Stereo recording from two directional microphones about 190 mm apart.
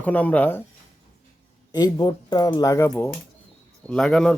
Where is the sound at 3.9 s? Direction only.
Centre (ahead or behind).